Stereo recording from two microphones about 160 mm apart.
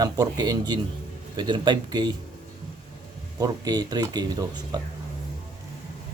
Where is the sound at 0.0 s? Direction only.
25° right (ahead or behind).